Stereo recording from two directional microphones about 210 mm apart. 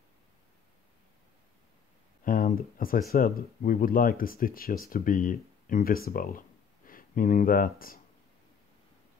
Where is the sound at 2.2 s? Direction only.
40° left (ahead or behind).